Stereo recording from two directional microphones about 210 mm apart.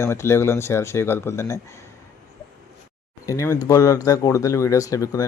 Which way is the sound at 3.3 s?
15° left (ahead or behind).